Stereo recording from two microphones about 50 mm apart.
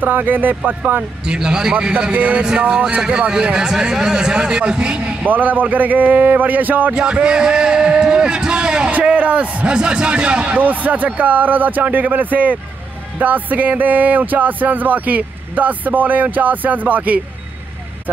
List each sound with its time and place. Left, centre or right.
0.0 s speech: right
1.2 s a man's voice: centre
3.0 s a man's voice: centre
5.2 s speech: right
7.0 s a sound: centre
9.1 s a man's voice: right
9.7 s a man's voice: centre
10.6 s speech: right